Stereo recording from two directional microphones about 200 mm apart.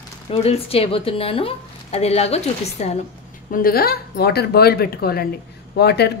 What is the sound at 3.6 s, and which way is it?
Speech, 50° left (ahead or behind).